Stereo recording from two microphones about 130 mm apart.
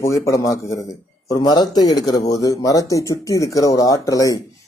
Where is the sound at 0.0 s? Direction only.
25° left (ahead or behind).